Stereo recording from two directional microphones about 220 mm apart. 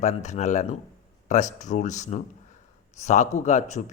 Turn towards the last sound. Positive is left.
turn(degrees=30)  # may be behind; listen again after turning